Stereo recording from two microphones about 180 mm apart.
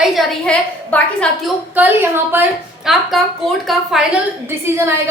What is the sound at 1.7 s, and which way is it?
A woman's voice, 10° right (ahead or behind).